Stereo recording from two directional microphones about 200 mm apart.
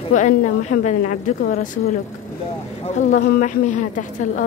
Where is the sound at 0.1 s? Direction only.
35° left (ahead or behind).